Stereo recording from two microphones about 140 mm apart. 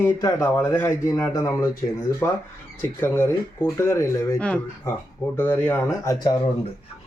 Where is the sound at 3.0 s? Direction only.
15° left (ahead or behind).